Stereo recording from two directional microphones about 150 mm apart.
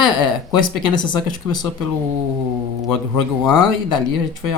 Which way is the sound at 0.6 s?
30° left (ahead or behind).